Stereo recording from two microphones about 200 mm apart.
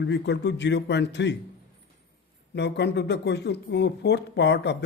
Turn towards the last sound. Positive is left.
turn(degrees=55)  # may be behind; listen again after turning